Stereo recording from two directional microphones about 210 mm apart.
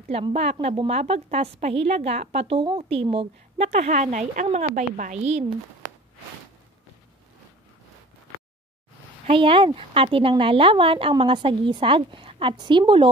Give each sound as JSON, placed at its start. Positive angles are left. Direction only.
{"t": 0.1, "sound": "a woman's voice", "side_deg": -30}
{"t": 9.2, "sound": "a woman's voice", "side_deg": -25}